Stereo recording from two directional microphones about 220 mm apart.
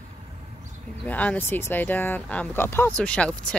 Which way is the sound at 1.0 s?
5° left (ahead or behind).